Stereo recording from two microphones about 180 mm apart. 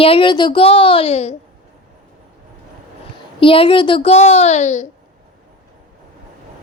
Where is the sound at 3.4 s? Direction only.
30° left (ahead or behind).